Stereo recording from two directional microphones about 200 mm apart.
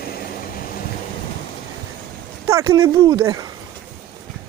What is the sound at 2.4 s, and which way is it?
Speech, 15° right (ahead or behind).